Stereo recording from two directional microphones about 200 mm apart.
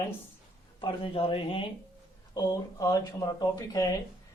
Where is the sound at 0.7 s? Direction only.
25° left (ahead or behind).